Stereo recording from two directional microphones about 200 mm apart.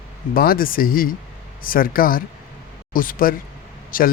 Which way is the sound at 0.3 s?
45° left (ahead or behind).